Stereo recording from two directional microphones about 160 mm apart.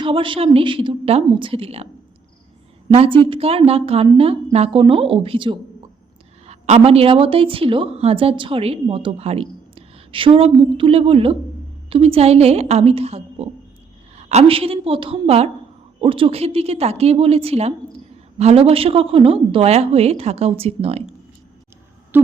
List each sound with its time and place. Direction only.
0.0 s a woman's voice: 30° right (ahead or behind)
2.9 s a woman's voice: 35° right (ahead or behind)
22.1 s a sound: 10° right (ahead or behind)